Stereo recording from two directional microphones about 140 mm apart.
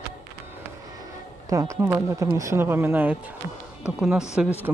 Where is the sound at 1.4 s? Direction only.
25° right (ahead or behind).